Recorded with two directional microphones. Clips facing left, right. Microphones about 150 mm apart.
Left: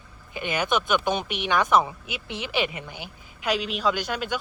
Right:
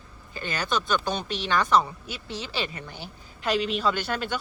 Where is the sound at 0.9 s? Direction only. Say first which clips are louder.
Left 3 dB; 20° left (ahead or behind).